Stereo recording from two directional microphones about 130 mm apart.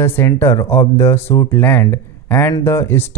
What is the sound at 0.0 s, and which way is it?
Speech, 15° left (ahead or behind).